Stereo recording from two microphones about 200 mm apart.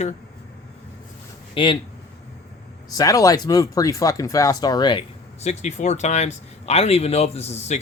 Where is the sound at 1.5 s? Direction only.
25° left (ahead or behind).